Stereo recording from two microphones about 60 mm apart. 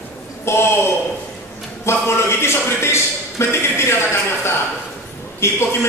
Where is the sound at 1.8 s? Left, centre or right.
Left.